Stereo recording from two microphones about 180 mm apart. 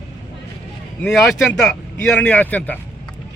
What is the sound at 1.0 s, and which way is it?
A man's voice, 5° left (ahead or behind).